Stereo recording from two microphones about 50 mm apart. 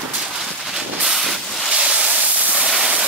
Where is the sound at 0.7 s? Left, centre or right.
Centre.